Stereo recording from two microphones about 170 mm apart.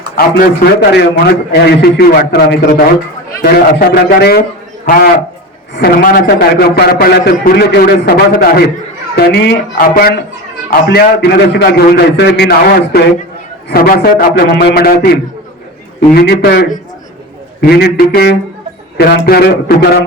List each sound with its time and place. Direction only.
0.2 s a man's voice: 65° left (ahead or behind)
4.9 s a man's voice: 55° left (ahead or behind)
9.1 s a man's voice: 75° left (ahead or behind); by 10.1 s 60° left (ahead or behind)
10.7 s a man's voice: 70° left (ahead or behind)
17.6 s a man's voice: 65° left (ahead or behind)